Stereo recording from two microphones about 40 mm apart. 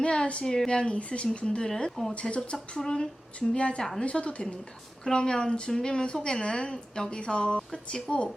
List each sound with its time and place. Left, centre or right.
0.0 s a woman's voice: left
1.7 s speech: centre
2.3 s a woman's voice: left
3.5 s a woman's voice: left